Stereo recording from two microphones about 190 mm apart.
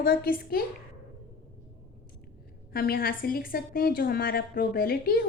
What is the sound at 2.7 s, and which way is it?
A woman's voice, 50° left (ahead or behind).